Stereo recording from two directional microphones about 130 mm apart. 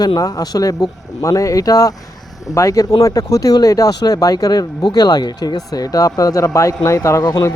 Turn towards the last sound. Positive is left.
turn(degrees=25)  # may be behind; listen again after turning